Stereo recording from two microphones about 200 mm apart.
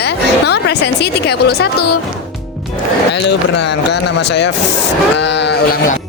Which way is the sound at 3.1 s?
60° left (ahead or behind).